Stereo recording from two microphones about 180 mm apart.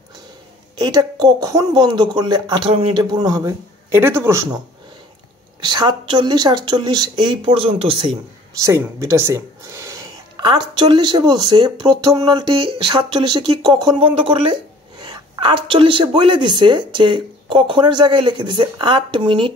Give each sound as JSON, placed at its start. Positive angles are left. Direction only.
{"t": 0.7, "sound": "speech", "side_deg": -20}
{"t": 5.6, "sound": "speech", "side_deg": -25}
{"t": 8.5, "sound": "speech", "side_deg": -15}